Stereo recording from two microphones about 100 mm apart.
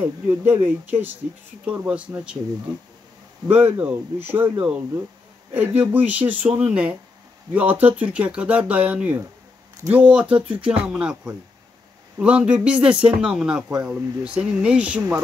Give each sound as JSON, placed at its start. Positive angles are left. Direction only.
{"t": 0.0, "sound": "speech", "side_deg": -25}
{"t": 3.5, "sound": "speech", "side_deg": -15}
{"t": 5.5, "sound": "speech", "side_deg": -15}
{"t": 12.2, "sound": "speech", "side_deg": -15}